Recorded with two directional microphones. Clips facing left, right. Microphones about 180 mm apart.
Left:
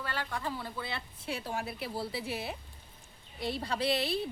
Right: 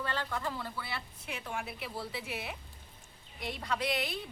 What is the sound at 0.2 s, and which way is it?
A woman's voice, 15° left (ahead or behind).